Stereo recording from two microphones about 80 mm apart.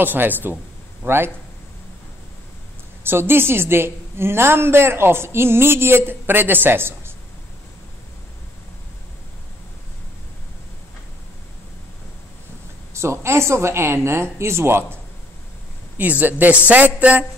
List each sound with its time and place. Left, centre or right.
0.0 s a woman's voice: right
3.0 s a woman's voice: right
12.9 s a woman's voice: right
16.0 s a woman's voice: right